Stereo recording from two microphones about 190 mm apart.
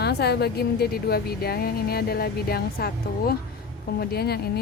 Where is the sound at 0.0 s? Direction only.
60° left (ahead or behind).